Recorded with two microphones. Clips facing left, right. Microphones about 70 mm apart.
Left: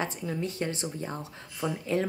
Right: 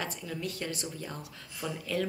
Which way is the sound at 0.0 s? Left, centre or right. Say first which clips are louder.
Left 5 dB; left.